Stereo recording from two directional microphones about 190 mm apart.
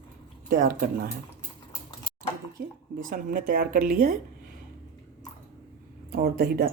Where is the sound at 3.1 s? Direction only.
45° right (ahead or behind).